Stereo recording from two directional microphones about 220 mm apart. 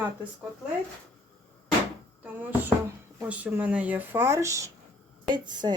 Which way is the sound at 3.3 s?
5° right (ahead or behind).